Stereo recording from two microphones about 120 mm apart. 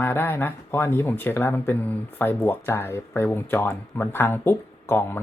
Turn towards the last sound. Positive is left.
turn(degrees=20)  # may be behind; listen again after turning